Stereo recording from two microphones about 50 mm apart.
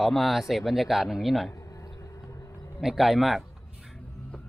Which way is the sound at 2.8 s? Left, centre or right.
Centre.